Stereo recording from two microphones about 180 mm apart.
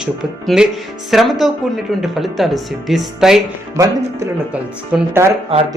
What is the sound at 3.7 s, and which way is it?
Speech, 15° right (ahead or behind).